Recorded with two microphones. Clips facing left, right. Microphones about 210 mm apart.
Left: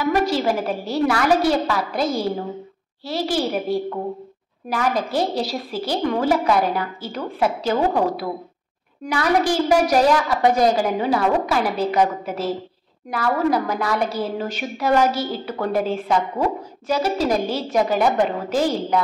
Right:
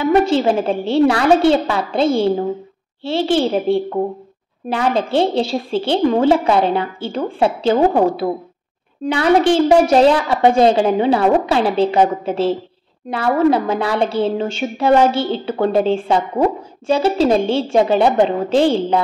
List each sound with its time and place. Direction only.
0.0 s a woman's voice: 25° right (ahead or behind)